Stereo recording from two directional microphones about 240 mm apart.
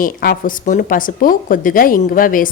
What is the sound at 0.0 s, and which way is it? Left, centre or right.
A woman's voice, left.